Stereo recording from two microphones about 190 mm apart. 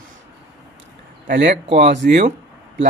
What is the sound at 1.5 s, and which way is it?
Speech, 35° right (ahead or behind).